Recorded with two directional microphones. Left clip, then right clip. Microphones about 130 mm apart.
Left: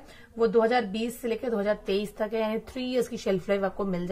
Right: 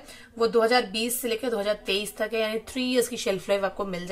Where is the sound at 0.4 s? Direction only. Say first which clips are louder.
Right 1 dB; 15° right (ahead or behind).